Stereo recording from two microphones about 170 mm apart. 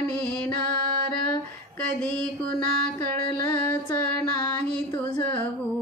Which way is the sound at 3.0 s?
15° left (ahead or behind).